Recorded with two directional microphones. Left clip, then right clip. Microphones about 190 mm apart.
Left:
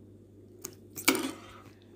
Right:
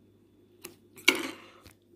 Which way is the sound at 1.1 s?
35° left (ahead or behind).